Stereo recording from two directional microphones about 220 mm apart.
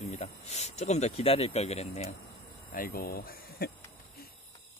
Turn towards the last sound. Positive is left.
turn(degrees=45)  # may be behind; listen again after turning